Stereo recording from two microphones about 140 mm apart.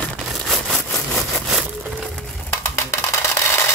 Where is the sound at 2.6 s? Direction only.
20° left (ahead or behind).